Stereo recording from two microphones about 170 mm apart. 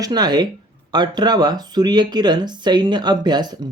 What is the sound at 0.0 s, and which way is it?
Speech, 25° right (ahead or behind).